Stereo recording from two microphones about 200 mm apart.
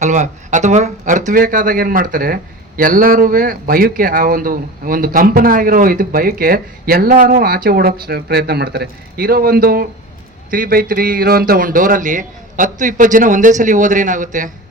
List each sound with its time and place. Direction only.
0.0 s speech: 35° right (ahead or behind)